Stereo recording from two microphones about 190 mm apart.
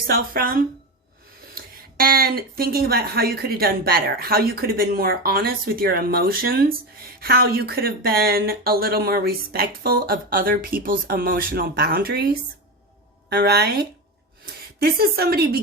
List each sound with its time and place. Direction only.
0.1 s a woman's voice: 50° right (ahead or behind)